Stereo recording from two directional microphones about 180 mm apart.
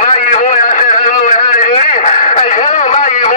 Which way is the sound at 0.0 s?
45° left (ahead or behind).